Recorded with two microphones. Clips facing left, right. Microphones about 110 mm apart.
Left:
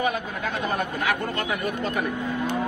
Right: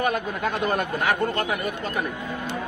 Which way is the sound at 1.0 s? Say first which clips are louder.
Right 3 dB; 45° right (ahead or behind).